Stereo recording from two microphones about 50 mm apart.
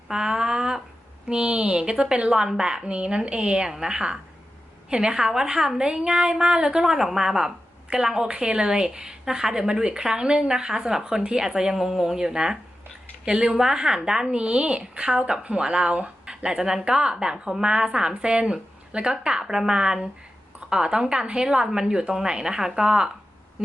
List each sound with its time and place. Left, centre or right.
0.1 s a sound: centre
1.3 s a woman's voice: centre
6.9 s a woman's voice: centre